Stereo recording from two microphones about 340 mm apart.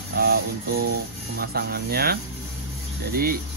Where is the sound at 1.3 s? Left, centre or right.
Right.